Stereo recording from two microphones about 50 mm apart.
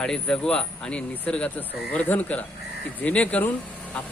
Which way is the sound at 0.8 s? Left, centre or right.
Left.